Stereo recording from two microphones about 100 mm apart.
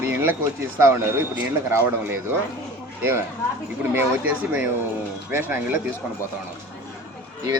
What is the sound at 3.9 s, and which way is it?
Speech, 20° right (ahead or behind).